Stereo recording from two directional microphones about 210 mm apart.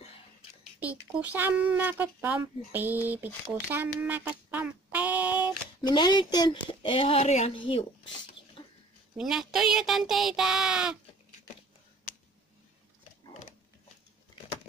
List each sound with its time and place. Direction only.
0.7 s speech: 10° right (ahead or behind)
3.7 s a sound: 10° right (ahead or behind)
5.8 s speech: 20° left (ahead or behind)
9.1 s speech: centre (ahead or behind)